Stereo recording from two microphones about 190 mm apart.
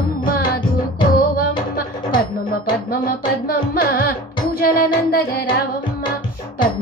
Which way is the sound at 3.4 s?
50° left (ahead or behind).